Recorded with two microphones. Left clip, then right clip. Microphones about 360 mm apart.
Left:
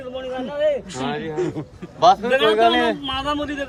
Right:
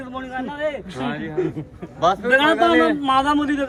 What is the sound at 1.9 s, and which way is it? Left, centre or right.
Speech, centre.